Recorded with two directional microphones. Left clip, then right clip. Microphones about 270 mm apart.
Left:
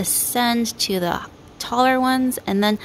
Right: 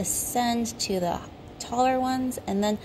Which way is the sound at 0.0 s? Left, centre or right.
Left.